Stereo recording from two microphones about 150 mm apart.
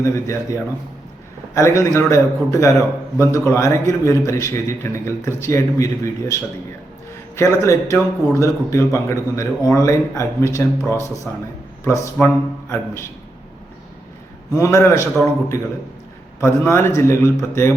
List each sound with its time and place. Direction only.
0.0 s a man's voice: 20° left (ahead or behind)
7.3 s a man's voice: 20° left (ahead or behind)
14.5 s a man's voice: 20° left (ahead or behind)
16.4 s a man's voice: 15° left (ahead or behind)